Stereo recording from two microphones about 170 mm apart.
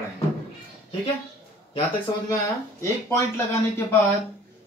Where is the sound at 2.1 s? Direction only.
25° left (ahead or behind).